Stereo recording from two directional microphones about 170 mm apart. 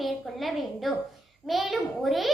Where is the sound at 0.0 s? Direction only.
Centre (ahead or behind).